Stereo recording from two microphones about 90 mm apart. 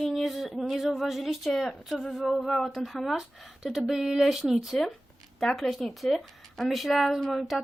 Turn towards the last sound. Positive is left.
turn(degrees=0)  # may be behind; listen again after turning